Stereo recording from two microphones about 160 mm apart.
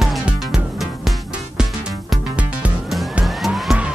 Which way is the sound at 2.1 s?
5° right (ahead or behind).